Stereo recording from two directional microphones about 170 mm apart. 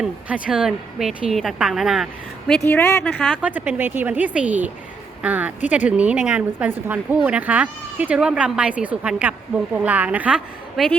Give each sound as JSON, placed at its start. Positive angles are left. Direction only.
{"t": 0.0, "sound": "a woman's voice", "side_deg": -5}
{"t": 2.6, "sound": "speech", "side_deg": 15}
{"t": 3.3, "sound": "a woman's voice", "side_deg": -10}